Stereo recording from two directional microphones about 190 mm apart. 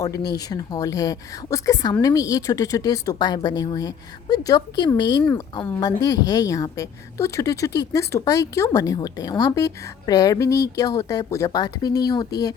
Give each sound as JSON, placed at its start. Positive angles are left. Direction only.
{"t": 0.3, "sound": "a woman's voice", "side_deg": 20}